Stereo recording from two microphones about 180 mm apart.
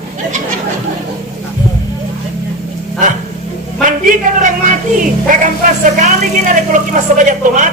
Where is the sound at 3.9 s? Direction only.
45° right (ahead or behind).